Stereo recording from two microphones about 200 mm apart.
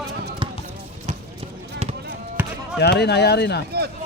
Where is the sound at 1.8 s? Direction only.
30° right (ahead or behind).